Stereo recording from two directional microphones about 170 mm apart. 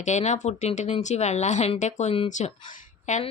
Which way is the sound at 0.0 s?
45° left (ahead or behind).